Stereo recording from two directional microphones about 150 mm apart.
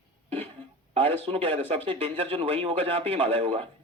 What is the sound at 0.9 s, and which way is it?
Speech, 40° right (ahead or behind).